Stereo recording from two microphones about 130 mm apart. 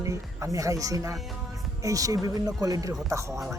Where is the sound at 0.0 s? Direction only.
25° right (ahead or behind).